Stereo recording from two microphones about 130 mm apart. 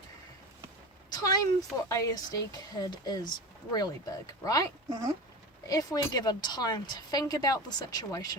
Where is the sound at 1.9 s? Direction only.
25° left (ahead or behind).